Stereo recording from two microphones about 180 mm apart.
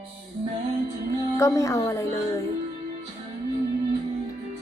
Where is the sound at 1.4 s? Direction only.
15° left (ahead or behind).